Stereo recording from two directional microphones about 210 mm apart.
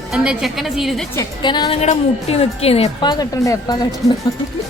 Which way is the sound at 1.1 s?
20° left (ahead or behind).